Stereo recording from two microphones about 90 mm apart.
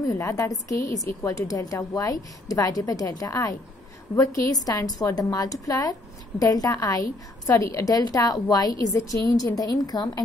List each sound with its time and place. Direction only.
0.2 s a woman's voice: 40° left (ahead or behind)